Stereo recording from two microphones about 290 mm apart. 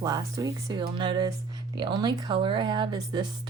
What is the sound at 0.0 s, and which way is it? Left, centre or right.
Speech, centre.